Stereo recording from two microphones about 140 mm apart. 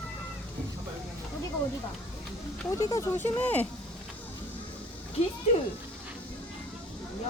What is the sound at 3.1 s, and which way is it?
Speech, 15° left (ahead or behind).